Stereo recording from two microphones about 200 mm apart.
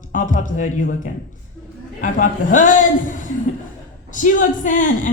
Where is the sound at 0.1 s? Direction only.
40° left (ahead or behind).